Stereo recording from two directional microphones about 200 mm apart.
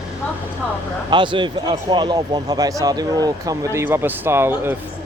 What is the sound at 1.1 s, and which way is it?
Speech, 25° right (ahead or behind).